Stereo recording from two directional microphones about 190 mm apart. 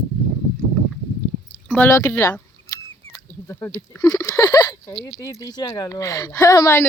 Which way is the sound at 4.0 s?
15° left (ahead or behind).